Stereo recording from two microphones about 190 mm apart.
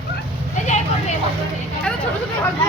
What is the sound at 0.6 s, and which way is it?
Vehicle, 40° left (ahead or behind).